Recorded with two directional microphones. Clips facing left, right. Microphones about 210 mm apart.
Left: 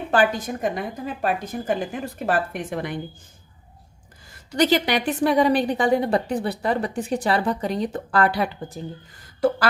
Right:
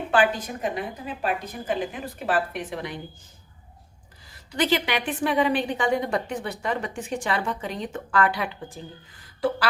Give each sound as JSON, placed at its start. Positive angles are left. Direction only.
{"t": 0.1, "sound": "a woman's voice", "side_deg": 45}
{"t": 4.3, "sound": "a woman's voice", "side_deg": 40}